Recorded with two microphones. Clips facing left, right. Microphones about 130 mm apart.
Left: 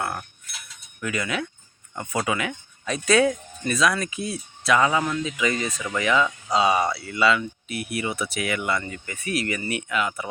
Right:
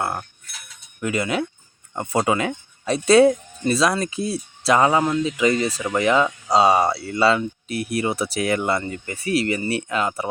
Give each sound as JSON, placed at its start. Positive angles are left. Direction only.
{"t": 0.0, "sound": "speech", "side_deg": -30}